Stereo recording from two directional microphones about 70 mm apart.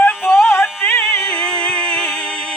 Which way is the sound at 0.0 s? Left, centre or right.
Left.